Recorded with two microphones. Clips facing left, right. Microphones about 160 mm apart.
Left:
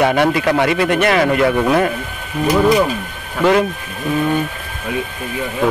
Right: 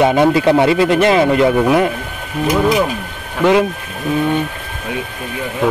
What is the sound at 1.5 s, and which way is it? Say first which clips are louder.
Speech: right 2 dB; 10° right (ahead or behind).